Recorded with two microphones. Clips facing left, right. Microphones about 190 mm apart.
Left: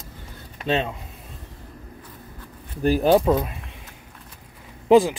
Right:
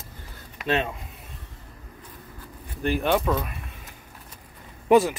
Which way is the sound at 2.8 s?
35° left (ahead or behind).